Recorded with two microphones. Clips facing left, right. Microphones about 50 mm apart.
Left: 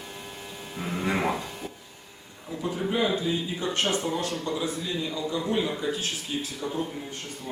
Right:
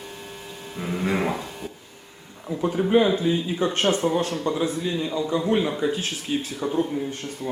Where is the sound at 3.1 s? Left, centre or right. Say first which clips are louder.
Right 5 dB; right.